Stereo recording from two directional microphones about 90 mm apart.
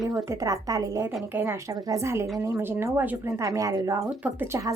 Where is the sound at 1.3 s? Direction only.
20° right (ahead or behind).